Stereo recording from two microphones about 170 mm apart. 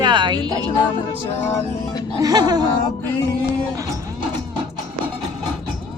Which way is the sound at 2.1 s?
25° right (ahead or behind).